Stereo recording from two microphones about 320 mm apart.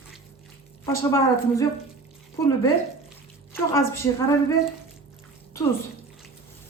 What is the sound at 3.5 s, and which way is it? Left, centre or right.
A woman's voice, centre.